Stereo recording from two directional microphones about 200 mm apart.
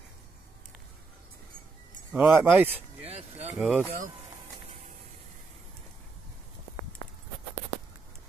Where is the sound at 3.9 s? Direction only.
40° right (ahead or behind).